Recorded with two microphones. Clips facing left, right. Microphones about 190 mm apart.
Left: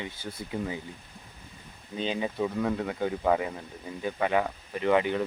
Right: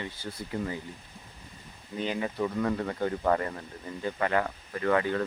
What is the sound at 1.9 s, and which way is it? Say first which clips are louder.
Speech: left 1 dB; 20° left (ahead or behind).